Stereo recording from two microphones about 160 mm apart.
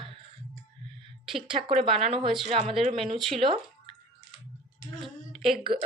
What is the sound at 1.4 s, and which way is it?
A woman's voice, 35° right (ahead or behind).